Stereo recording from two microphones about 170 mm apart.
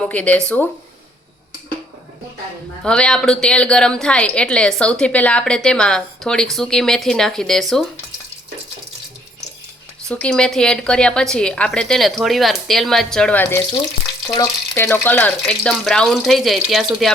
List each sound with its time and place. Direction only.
0.0 s speech: 5° left (ahead or behind)
2.8 s a woman's voice: 5° left (ahead or behind)
10.1 s a woman's voice: 5° left (ahead or behind)